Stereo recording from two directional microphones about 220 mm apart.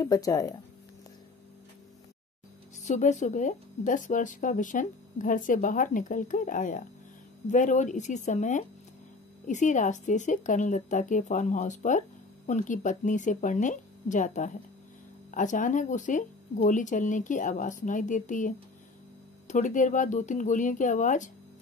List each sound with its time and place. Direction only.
0.0 s speech: 15° left (ahead or behind)
2.8 s speech: 35° left (ahead or behind)